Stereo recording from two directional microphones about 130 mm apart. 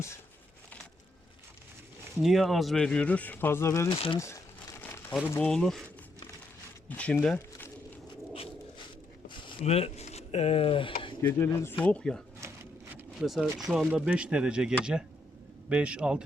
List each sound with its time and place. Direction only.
2.1 s speech: centre (ahead or behind); by 3.8 s 20° left (ahead or behind)
3.8 s speech: 45° left (ahead or behind)
4.8 s crumpling: 20° left (ahead or behind)
5.4 s speech: 5° left (ahead or behind)
6.8 s speech: 10° left (ahead or behind)
9.3 s a sound: 40° left (ahead or behind)
9.6 s speech: 50° left (ahead or behind)
11.2 s speech: 20° left (ahead or behind)
11.9 s speech: 5° left (ahead or behind)
12.4 s a sound: 20° right (ahead or behind)
13.2 s speech: centre (ahead or behind)